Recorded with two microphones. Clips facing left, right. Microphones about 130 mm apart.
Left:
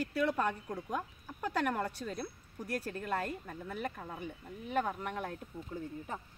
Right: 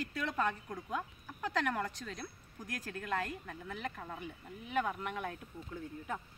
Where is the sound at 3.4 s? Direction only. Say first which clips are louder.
Left 3 dB; 10° left (ahead or behind).